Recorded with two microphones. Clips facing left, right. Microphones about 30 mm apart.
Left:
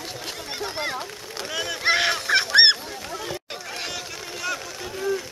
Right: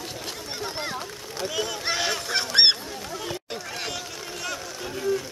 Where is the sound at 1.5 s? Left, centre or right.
Left.